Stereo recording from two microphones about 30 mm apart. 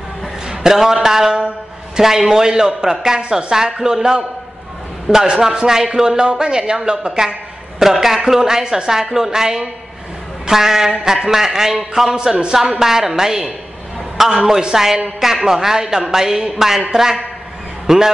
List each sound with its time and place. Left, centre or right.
0.5 s a sound: centre
1.0 s speech: centre
7.8 s a woman's voice: centre